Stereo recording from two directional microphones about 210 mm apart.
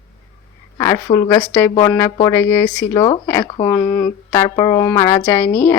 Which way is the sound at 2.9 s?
20° left (ahead or behind).